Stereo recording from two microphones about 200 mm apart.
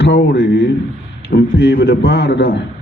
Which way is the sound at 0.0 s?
55° left (ahead or behind).